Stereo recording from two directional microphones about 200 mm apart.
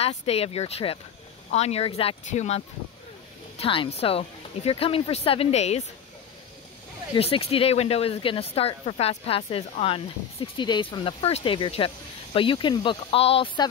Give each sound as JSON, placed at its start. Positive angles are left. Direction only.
{"t": 0.0, "sound": "speech", "side_deg": 30}
{"t": 7.2, "sound": "speech", "side_deg": 30}